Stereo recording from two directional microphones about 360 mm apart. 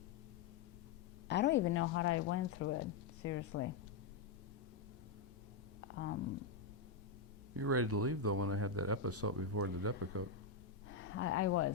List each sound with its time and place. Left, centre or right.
1.3 s speech: left
7.5 s speech: right
10.8 s speech: left